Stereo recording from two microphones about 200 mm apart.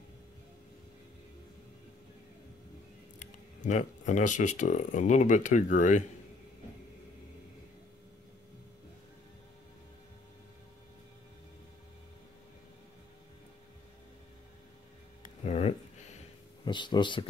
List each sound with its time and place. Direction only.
3.2 s speech: 40° left (ahead or behind)
15.2 s music: 35° left (ahead or behind)
16.6 s speech: 20° left (ahead or behind)